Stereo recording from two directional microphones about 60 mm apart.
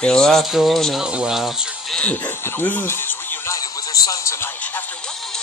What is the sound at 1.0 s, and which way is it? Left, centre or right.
Speech, centre.